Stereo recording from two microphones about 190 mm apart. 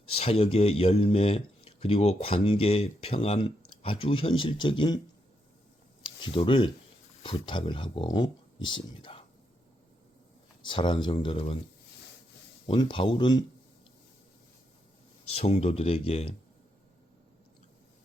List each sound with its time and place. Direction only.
0.1 s speech: 30° left (ahead or behind)
6.2 s speech: 25° left (ahead or behind)
10.7 s speech: 25° left (ahead or behind)
12.6 s speech: 25° left (ahead or behind)
15.3 s speech: 35° left (ahead or behind)